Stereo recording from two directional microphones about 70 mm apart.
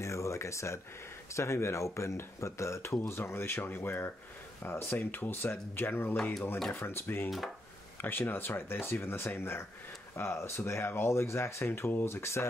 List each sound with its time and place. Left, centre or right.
0.0 s a sound: left
1.3 s speech: left
7.2 s wood: centre
8.0 s speech: left